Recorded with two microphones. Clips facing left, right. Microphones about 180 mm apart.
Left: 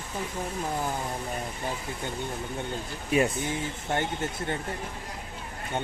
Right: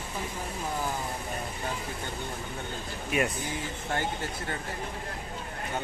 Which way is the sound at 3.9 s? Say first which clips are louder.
Left 2 dB; 25° left (ahead or behind).